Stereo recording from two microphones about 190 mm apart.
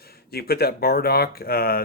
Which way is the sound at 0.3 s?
55° left (ahead or behind).